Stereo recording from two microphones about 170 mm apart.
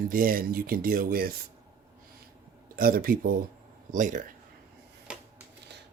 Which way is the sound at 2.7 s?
55° right (ahead or behind).